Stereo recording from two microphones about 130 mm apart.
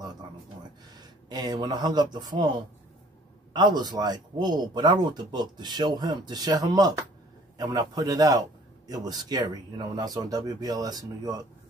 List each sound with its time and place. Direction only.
1.3 s speech: 30° right (ahead or behind)
3.5 s a man's voice: 35° right (ahead or behind)